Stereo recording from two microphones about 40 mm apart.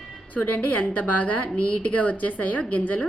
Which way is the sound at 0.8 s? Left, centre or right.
Left.